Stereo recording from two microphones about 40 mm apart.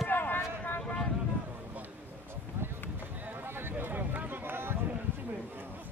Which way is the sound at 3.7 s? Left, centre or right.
Right.